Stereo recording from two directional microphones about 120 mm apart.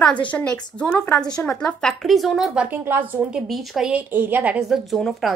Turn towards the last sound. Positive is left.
turn(degrees=0)  # may be behind; listen again after turning